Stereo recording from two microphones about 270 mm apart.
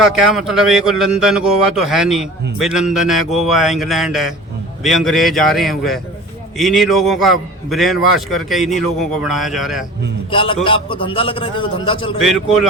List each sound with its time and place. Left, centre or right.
0.0 s a man's voice: centre
10.3 s a man's voice: centre